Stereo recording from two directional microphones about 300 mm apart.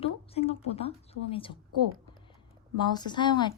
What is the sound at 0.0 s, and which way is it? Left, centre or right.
A woman's voice, centre.